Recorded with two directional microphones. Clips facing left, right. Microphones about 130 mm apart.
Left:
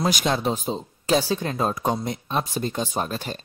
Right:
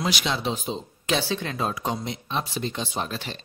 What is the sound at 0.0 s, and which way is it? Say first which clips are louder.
Speech: left 4 dB; 45° left (ahead or behind).